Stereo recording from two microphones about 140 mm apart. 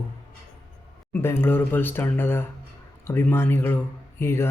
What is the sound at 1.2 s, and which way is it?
Speech, 15° left (ahead or behind).